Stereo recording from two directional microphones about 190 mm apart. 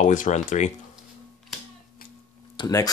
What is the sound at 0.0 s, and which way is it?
Speech, 40° left (ahead or behind).